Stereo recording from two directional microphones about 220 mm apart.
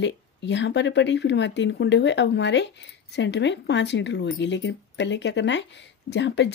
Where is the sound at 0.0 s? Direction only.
55° left (ahead or behind).